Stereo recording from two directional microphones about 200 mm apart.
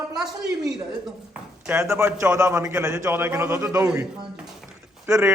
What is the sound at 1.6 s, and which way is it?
A man's voice, 15° right (ahead or behind).